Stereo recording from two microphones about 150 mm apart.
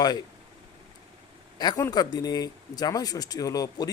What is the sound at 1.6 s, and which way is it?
Speech, 25° left (ahead or behind).